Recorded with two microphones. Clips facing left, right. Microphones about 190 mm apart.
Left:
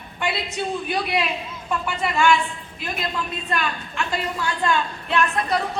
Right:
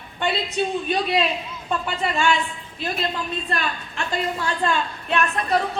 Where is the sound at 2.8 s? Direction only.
35° right (ahead or behind).